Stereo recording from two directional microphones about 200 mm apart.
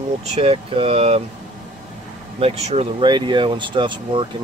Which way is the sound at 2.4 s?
30° right (ahead or behind).